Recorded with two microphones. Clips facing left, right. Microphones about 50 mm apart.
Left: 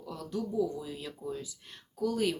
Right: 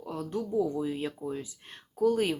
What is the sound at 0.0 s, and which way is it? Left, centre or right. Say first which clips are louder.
Speech: right 3 dB; right.